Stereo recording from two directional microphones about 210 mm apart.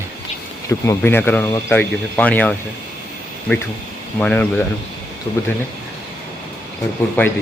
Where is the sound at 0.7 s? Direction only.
10° left (ahead or behind).